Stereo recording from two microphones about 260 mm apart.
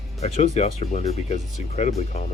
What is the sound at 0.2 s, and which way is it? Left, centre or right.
Speech, left.